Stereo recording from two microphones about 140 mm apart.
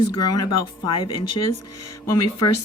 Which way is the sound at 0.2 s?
30° left (ahead or behind).